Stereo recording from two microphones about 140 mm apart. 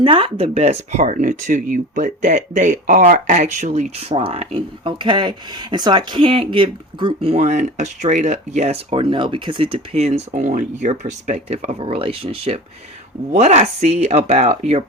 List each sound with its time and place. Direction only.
0.0 s speech: 40° right (ahead or behind)
13.3 s speech: 55° right (ahead or behind)